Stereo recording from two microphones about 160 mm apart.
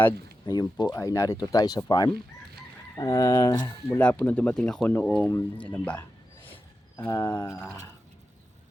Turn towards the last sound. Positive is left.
turn(degrees=15)  # may be behind; listen again after turning